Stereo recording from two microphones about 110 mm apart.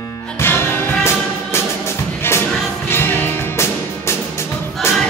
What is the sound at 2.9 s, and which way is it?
Music, 20° left (ahead or behind).